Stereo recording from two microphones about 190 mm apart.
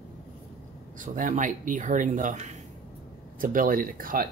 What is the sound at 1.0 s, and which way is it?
Speech, 45° right (ahead or behind).